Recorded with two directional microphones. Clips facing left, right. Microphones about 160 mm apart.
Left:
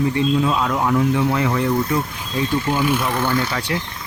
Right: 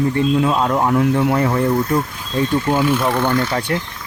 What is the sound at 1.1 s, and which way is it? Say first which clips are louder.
Speech: right 3 dB; 45° right (ahead or behind).